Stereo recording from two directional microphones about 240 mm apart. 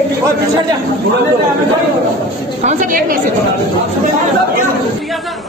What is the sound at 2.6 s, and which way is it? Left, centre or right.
Speech, right.